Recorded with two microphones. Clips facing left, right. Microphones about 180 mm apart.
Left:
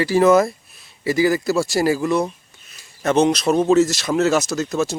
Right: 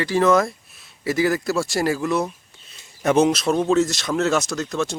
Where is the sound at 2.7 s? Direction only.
20° right (ahead or behind); by 5.0 s 5° left (ahead or behind).